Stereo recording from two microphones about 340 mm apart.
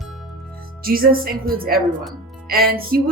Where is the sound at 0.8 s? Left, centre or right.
Right.